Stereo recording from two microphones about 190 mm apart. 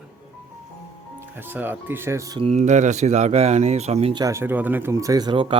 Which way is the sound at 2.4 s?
35° right (ahead or behind).